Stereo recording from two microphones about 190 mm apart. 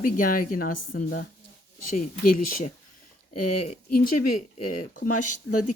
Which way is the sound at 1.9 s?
45° left (ahead or behind).